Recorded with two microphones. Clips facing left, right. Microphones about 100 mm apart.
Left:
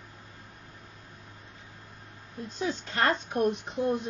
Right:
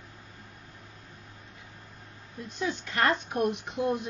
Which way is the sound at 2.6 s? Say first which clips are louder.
Even; 35° left (ahead or behind).